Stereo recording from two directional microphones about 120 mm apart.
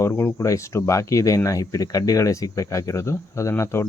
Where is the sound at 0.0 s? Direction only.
25° left (ahead or behind).